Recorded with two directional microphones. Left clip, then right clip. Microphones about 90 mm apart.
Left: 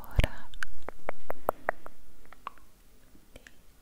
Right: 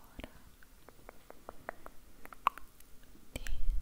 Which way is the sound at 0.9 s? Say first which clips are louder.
Left 16 dB; 35° left (ahead or behind).